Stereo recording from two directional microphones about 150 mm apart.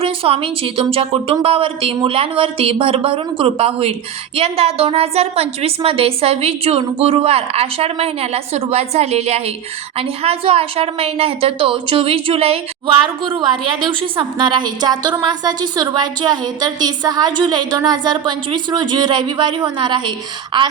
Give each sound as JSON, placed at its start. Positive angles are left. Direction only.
{"t": 0.0, "sound": "a woman's voice", "side_deg": -40}